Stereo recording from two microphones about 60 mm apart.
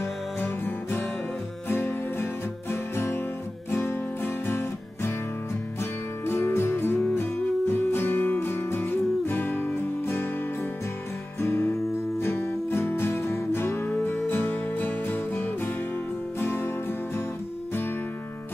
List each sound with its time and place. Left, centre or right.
0.4 s music: left
11.4 s music: left